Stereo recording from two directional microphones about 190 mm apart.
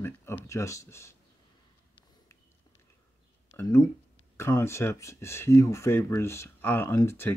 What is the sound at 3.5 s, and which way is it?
Speech, 15° left (ahead or behind).